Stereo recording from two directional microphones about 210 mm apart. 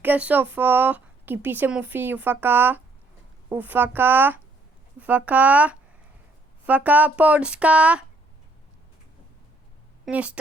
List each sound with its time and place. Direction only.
0.0 s speech: 5° right (ahead or behind)
10.1 s speech: 5° right (ahead or behind)